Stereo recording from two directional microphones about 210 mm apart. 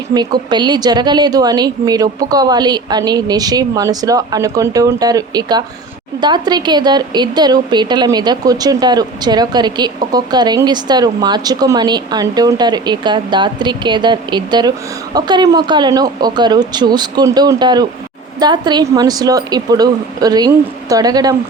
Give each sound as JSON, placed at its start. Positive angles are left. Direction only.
{"t": 0.1, "sound": "a woman's voice", "side_deg": -20}